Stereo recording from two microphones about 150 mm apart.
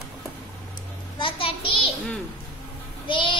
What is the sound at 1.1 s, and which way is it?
Speech, 35° left (ahead or behind).